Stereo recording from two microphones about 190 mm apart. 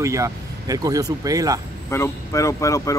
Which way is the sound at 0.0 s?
15° right (ahead or behind).